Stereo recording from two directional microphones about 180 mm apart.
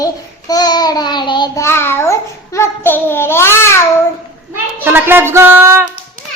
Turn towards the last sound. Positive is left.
turn(degrees=-15)  # may be behind; listen again after turning